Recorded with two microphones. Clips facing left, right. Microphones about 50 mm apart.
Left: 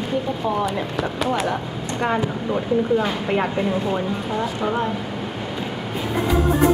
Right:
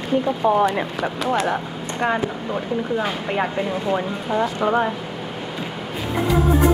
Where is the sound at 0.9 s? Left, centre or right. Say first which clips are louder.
Right 1 dB; centre.